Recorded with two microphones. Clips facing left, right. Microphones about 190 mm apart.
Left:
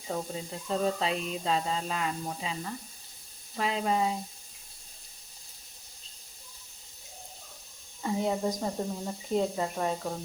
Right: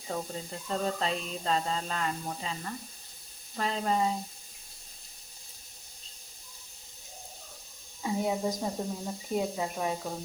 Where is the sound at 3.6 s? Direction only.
5° left (ahead or behind).